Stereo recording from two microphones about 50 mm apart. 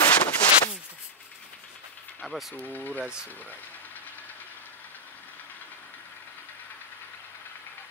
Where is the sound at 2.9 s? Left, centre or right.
Centre.